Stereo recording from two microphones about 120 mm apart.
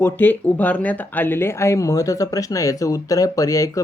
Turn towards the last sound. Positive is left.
turn(degrees=25)  # may be behind; listen again after turning